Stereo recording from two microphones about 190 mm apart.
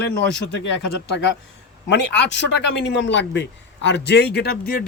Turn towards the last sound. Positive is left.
turn(degrees=55)  # may be behind; listen again after turning